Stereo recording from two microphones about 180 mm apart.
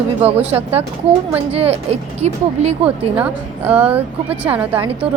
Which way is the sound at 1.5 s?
35° right (ahead or behind).